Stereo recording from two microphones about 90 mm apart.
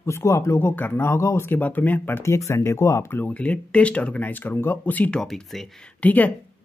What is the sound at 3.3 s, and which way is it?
Speech, 15° left (ahead or behind).